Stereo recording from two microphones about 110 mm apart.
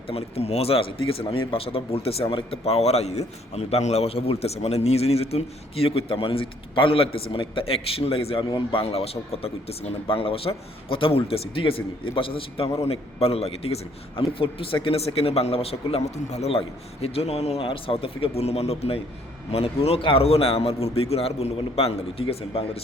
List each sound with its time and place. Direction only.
0.1 s speech: 65° left (ahead or behind)
17.7 s speech: 55° left (ahead or behind)